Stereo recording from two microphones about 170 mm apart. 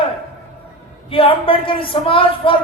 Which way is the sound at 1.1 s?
30° left (ahead or behind).